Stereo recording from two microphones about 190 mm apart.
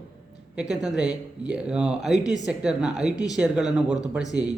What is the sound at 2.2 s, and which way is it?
Speech, 20° left (ahead or behind).